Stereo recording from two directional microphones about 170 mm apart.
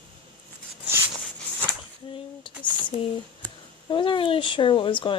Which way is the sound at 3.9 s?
30° left (ahead or behind).